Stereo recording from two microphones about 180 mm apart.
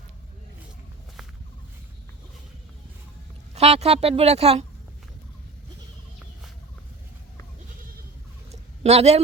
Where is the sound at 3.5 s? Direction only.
35° right (ahead or behind).